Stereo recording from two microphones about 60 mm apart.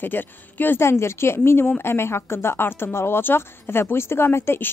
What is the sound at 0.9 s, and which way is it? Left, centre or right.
Speech, left.